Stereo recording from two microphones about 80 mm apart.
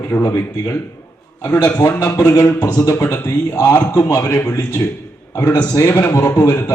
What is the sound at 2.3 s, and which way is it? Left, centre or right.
Speech, left.